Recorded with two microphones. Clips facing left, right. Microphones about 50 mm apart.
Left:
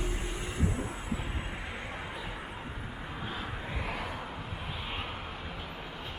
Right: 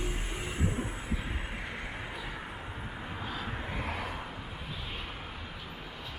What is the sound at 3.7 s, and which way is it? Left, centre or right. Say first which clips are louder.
Vehicle: even; right.